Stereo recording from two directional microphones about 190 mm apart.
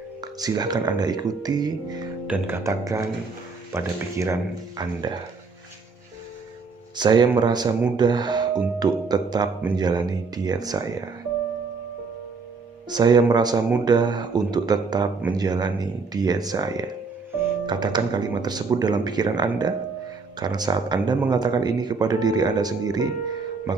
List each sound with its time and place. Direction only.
0.2 s speech: 20° right (ahead or behind)
2.2 s speech: 10° right (ahead or behind)
7.0 s speech: 25° right (ahead or behind)
12.9 s speech: 20° right (ahead or behind)